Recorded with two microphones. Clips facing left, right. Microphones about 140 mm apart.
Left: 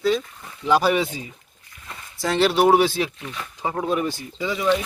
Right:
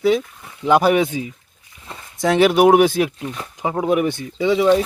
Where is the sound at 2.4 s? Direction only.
10° right (ahead or behind).